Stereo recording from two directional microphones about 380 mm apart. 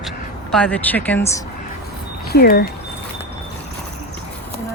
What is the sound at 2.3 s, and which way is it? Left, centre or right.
Speech, left.